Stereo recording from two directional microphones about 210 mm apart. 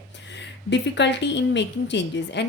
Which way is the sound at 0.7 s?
55° left (ahead or behind).